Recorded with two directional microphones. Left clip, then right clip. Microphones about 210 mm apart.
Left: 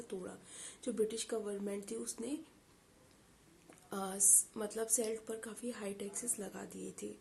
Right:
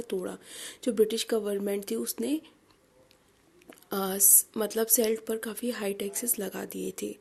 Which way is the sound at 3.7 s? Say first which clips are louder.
Right 11 dB; 40° right (ahead or behind).